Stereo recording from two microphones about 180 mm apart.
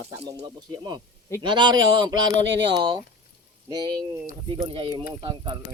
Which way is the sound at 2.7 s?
25° right (ahead or behind).